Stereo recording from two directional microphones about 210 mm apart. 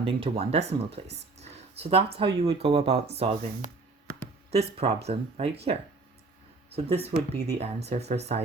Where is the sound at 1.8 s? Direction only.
25° right (ahead or behind).